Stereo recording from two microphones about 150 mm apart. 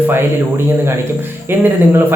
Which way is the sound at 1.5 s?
15° right (ahead or behind).